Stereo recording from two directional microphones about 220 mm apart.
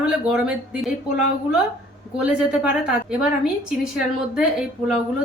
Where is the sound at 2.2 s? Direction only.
5° right (ahead or behind).